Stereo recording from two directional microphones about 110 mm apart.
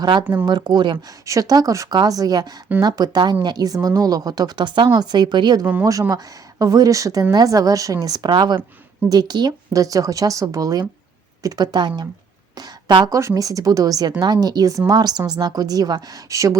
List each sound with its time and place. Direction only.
0.0 s speech: 40° right (ahead or behind)
1.2 s speech: 30° right (ahead or behind)
5.8 s speech: 30° right (ahead or behind)
12.5 s a sound: 45° right (ahead or behind)
13.1 s speech: 30° right (ahead or behind)